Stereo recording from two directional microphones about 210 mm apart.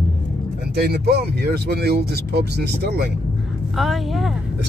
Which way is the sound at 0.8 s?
50° right (ahead or behind).